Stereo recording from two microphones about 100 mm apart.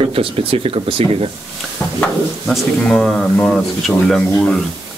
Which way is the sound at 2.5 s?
Centre (ahead or behind).